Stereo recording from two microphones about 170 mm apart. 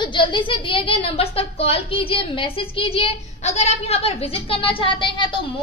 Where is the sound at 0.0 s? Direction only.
30° left (ahead or behind).